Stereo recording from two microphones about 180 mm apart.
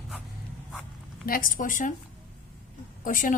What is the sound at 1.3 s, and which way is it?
Speech, 50° left (ahead or behind).